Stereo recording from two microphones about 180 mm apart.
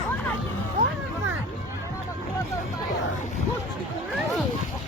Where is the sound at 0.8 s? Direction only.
50° right (ahead or behind).